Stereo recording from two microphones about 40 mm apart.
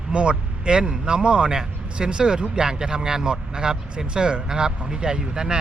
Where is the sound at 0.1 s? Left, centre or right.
Right.